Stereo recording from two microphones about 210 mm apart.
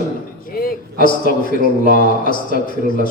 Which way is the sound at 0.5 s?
45° left (ahead or behind).